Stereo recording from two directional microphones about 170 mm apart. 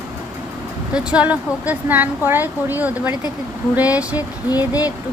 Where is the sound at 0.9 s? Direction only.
5° right (ahead or behind).